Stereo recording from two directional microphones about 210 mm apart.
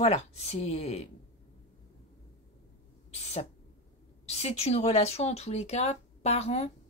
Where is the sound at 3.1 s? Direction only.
30° left (ahead or behind).